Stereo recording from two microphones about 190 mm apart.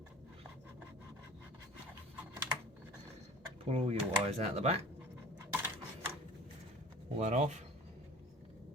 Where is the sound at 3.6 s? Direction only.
30° right (ahead or behind).